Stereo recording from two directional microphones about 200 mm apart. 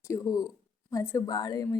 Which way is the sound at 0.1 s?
15° left (ahead or behind).